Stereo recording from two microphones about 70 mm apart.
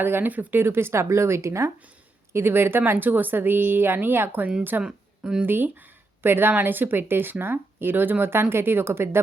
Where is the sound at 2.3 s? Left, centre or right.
Right.